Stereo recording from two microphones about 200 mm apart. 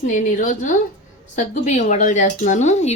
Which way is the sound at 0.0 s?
40° left (ahead or behind).